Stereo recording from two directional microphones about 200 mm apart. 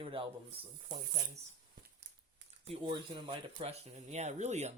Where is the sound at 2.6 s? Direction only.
25° right (ahead or behind).